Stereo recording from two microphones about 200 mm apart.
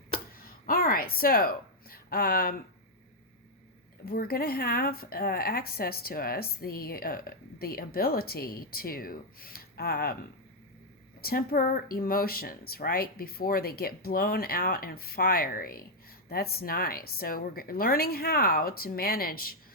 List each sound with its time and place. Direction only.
0.6 s a woman's voice: 45° left (ahead or behind)
4.0 s speech: 50° left (ahead or behind)
11.2 s speech: 50° left (ahead or behind)